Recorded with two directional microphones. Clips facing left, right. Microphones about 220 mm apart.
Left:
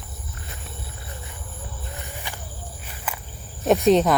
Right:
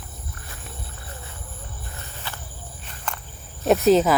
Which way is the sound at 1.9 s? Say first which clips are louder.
Left 1 dB; 15° left (ahead or behind).